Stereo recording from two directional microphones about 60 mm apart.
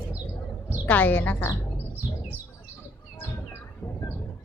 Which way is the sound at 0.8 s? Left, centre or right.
Left.